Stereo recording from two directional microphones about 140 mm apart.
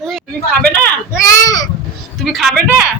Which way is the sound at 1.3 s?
25° left (ahead or behind).